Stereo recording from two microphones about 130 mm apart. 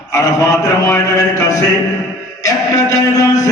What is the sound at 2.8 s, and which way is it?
Speech, 25° left (ahead or behind).